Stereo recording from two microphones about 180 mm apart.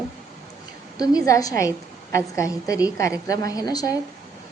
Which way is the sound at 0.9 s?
20° left (ahead or behind).